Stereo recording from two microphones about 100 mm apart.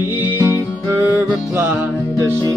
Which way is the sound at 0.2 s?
25° right (ahead or behind).